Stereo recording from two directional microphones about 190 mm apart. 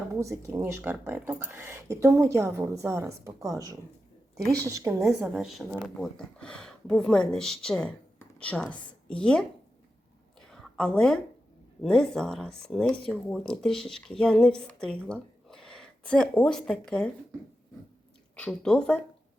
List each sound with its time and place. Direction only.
0.2 s speech: 15° right (ahead or behind)
4.4 s a woman's voice: 5° left (ahead or behind)
4.7 s speech: 15° right (ahead or behind)
5.3 s speech: centre (ahead or behind)
10.5 s a sound: 5° left (ahead or behind)
11.8 s speech: 5° left (ahead or behind)
18.3 s speech: 5° left (ahead or behind)